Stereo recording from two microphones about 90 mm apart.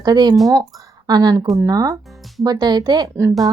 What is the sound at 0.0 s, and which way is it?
Speech, 50° right (ahead or behind).